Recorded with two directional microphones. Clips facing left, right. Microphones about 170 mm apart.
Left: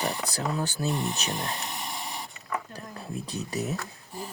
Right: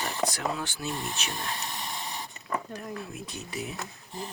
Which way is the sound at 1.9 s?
15° left (ahead or behind).